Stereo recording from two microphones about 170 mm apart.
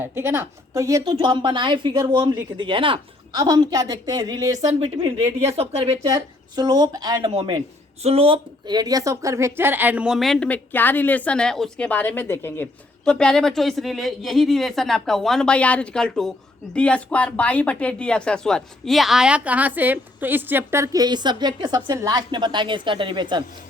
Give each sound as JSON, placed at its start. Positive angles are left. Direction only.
{"t": 0.0, "sound": "a woman's voice", "side_deg": -10}
{"t": 4.8, "sound": "speech", "side_deg": -30}
{"t": 6.1, "sound": "a woman's voice", "side_deg": -25}